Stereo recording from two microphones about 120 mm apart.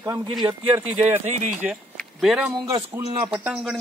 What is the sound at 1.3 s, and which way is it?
Speech, 70° right (ahead or behind).